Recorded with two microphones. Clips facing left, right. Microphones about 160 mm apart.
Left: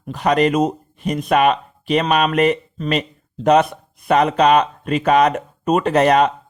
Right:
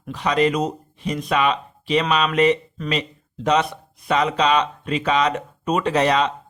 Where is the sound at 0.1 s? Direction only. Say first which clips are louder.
Left 3 dB; 50° left (ahead or behind).